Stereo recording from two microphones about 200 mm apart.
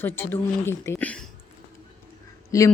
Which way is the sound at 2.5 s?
15° left (ahead or behind).